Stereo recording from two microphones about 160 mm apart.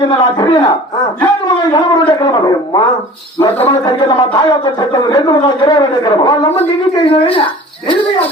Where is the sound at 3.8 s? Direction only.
30° left (ahead or behind).